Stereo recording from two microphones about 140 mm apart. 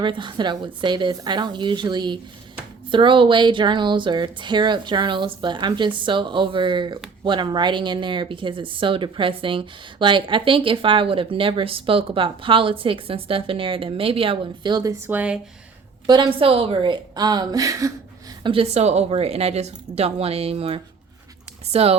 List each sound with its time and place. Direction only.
0.0 s speech: 35° right (ahead or behind)
15.0 s speech: 10° right (ahead or behind)
16.0 s a woman's voice: 35° right (ahead or behind)
18.4 s speech: 40° right (ahead or behind)